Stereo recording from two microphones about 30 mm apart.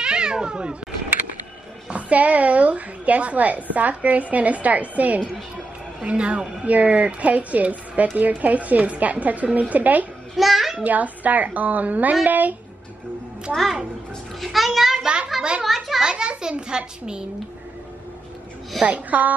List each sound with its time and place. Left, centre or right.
0.0 s cat: right
1.9 s a woman's voice: right
6.0 s speech: right
6.6 s a woman's voice: right
8.2 s a woman's voice: right
10.3 s a sound: centre
10.9 s a woman's voice: right
14.4 s a child's voice: centre
15.6 s a sound: centre
16.0 s a child's voice: right
18.9 s a woman's voice: right